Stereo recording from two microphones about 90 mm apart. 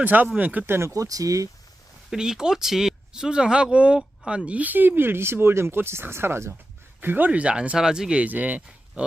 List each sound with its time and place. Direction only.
0.0 s speech: 20° right (ahead or behind)
0.8 s speech: 35° right (ahead or behind)
2.0 s speech: 5° right (ahead or behind)